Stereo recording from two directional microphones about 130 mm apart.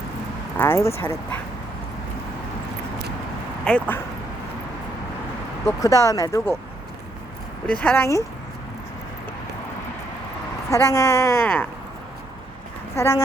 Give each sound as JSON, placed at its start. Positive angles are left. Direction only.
{"t": 0.6, "sound": "speech", "side_deg": 20}
{"t": 3.6, "sound": "speech", "side_deg": 5}
{"t": 5.6, "sound": "speech", "side_deg": 25}
{"t": 7.7, "sound": "speech", "side_deg": 10}
{"t": 10.7, "sound": "speech", "side_deg": 20}
{"t": 13.0, "sound": "speech", "side_deg": 20}